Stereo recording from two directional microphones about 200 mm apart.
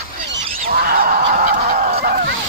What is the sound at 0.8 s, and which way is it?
Honk, 45° right (ahead or behind).